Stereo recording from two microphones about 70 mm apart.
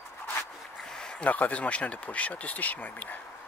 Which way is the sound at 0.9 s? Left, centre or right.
Centre.